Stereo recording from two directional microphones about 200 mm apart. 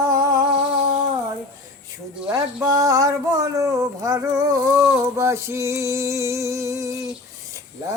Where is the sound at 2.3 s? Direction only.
20° right (ahead or behind).